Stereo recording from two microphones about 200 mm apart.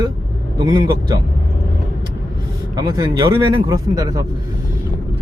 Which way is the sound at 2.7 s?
20° right (ahead or behind).